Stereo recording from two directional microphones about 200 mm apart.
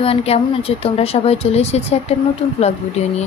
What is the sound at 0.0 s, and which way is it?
A woman's voice, 30° left (ahead or behind).